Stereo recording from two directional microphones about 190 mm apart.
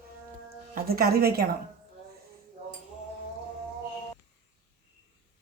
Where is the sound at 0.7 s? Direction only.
50° right (ahead or behind).